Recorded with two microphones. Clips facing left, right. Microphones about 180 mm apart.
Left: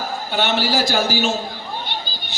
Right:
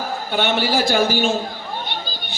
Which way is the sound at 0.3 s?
55° right (ahead or behind).